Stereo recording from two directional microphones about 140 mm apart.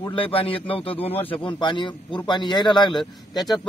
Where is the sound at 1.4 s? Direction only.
35° left (ahead or behind).